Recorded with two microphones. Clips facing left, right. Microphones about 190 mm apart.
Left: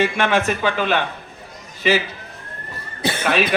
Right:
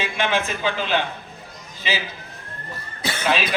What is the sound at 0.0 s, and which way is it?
A man's voice, 70° left (ahead or behind).